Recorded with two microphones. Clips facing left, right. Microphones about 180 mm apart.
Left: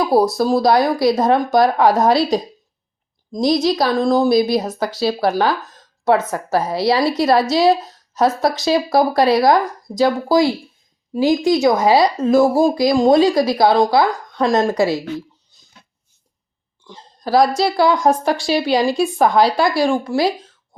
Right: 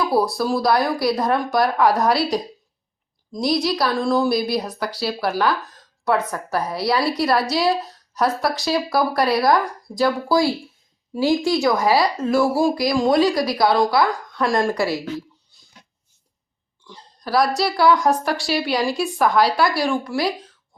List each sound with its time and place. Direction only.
0.0 s speech: 45° left (ahead or behind)
0.6 s speech: 25° left (ahead or behind)
3.3 s a woman's voice: 45° left (ahead or behind)
3.6 s speech: 20° left (ahead or behind)
4.0 s speech: 40° left (ahead or behind)
4.3 s speech: 20° left (ahead or behind)
16.9 s speech: 25° left (ahead or behind)